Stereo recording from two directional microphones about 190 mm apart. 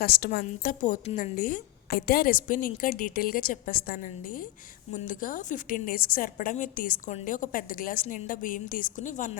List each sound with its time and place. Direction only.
0.0 s a woman's voice: 55° left (ahead or behind)